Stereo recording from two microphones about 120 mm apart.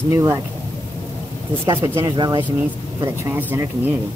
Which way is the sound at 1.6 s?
40° right (ahead or behind).